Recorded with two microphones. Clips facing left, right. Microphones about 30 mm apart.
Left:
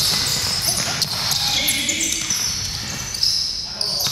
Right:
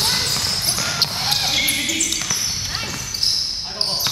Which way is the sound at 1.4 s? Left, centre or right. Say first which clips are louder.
Even; centre.